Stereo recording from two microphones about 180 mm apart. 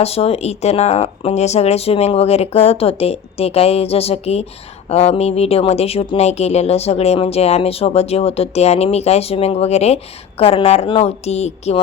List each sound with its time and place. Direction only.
0.0 s speech: 35° left (ahead or behind)